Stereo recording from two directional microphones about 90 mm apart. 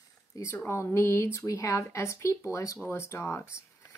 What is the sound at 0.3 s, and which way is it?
Speech, 35° left (ahead or behind).